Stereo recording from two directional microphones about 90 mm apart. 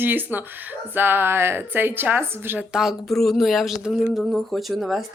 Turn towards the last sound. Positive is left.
turn(degrees=0)  # may be behind; listen again after turning